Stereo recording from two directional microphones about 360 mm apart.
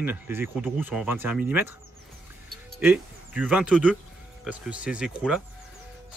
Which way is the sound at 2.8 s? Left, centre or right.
Centre.